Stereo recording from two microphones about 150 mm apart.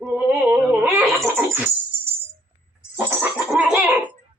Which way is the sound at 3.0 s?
10° right (ahead or behind).